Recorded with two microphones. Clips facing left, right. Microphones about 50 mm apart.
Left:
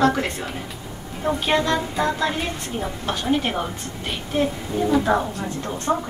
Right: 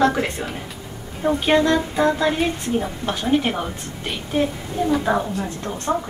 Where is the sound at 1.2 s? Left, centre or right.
Centre.